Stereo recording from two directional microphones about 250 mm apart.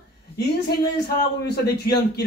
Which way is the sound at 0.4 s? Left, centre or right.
Left.